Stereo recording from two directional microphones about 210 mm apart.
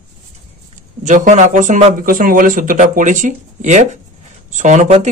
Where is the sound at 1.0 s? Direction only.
35° right (ahead or behind).